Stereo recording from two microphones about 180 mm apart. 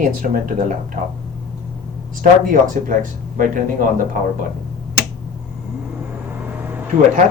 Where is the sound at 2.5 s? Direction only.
50° right (ahead or behind).